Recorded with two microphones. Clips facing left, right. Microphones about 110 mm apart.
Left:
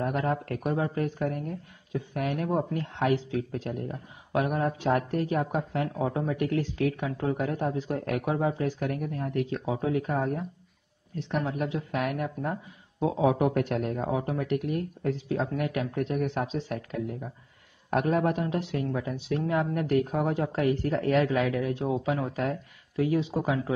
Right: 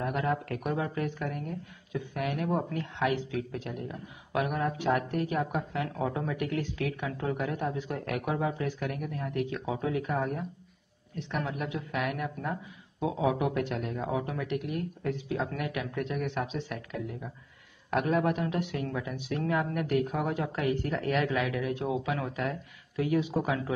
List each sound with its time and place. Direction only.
0.0 s speech: 40° left (ahead or behind)